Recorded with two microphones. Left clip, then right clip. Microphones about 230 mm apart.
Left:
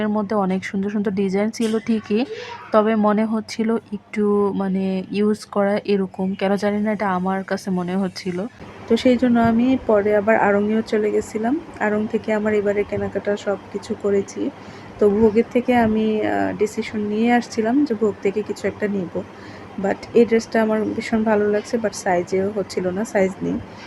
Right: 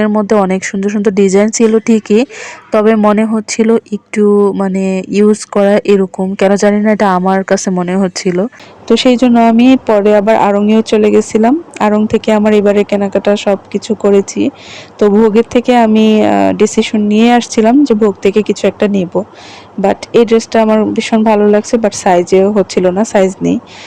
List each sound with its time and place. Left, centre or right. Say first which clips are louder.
0.0 s speech: right 11 dB; right